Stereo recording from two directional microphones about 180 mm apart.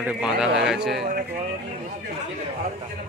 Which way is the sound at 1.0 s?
50° right (ahead or behind).